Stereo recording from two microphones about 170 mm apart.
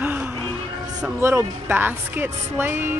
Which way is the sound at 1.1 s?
15° right (ahead or behind).